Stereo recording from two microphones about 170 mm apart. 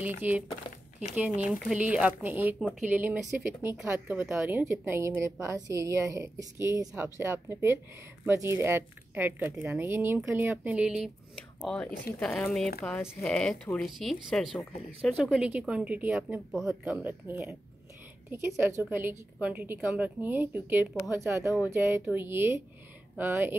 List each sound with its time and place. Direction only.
0.0 s a woman's voice: 10° right (ahead or behind)
1.4 s a woman's voice: centre (ahead or behind)
11.6 s a woman's voice: 5° left (ahead or behind); by 23.5 s 10° right (ahead or behind)